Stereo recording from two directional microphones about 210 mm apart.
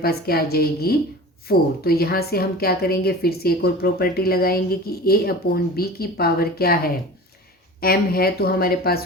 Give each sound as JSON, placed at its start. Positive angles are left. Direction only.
{"t": 0.0, "sound": "a woman's voice", "side_deg": 45}